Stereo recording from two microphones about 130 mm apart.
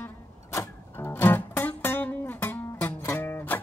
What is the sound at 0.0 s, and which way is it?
Music, 20° left (ahead or behind).